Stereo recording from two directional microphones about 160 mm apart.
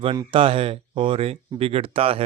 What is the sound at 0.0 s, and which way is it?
A man's voice, 30° right (ahead or behind).